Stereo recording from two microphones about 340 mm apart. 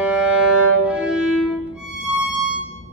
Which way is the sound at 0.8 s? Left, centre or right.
Centre.